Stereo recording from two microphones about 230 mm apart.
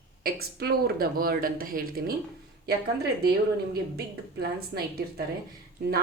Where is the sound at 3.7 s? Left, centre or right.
Right.